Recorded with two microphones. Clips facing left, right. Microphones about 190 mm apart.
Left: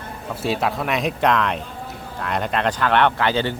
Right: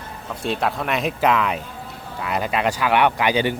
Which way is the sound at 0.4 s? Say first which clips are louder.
Left 1 dB; centre (ahead or behind).